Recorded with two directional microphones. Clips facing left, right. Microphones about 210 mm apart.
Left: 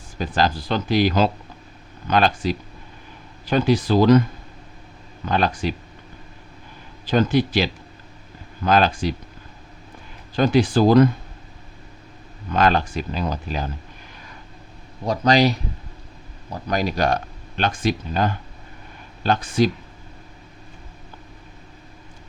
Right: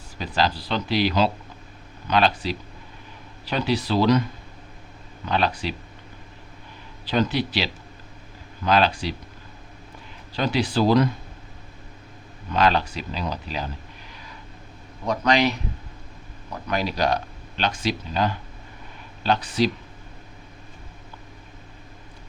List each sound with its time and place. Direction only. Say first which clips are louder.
0.2 s speech: left 3 dB; 50° left (ahead or behind)
5.2 s speech: left 3 dB; 45° left (ahead or behind)
7.0 s speech: left 4 dB; 45° left (ahead or behind)
10.3 s speech: left 6 dB; 50° left (ahead or behind)
12.5 s speech: left 2 dB; 50° left (ahead or behind)
15.0 s speech: left 3 dB; 35° left (ahead or behind)